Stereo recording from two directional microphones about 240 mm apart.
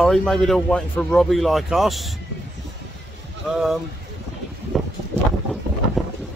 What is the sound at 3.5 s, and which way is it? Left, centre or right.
Speech, centre.